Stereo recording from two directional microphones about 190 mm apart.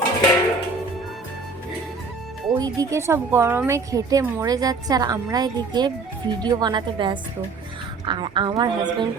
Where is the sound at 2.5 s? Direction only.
20° right (ahead or behind).